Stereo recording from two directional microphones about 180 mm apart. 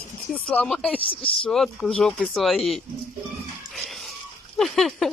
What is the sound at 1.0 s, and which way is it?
Speech, 30° left (ahead or behind).